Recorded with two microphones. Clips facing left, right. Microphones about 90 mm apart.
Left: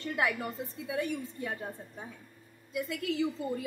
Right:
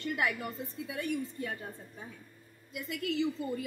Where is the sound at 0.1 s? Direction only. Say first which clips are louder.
Left 2 dB; 30° left (ahead or behind).